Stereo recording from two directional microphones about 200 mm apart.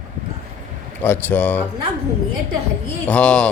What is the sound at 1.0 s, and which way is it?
Speech, 10° left (ahead or behind).